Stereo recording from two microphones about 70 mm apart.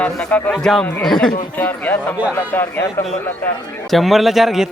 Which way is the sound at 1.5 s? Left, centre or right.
Left.